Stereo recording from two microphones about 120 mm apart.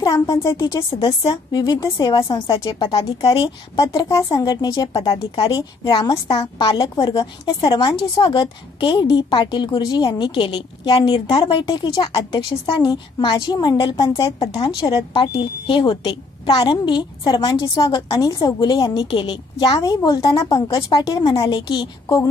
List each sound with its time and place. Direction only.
0.0 s a woman's voice: 30° left (ahead or behind)
14.8 s a woman's voice: 45° left (ahead or behind)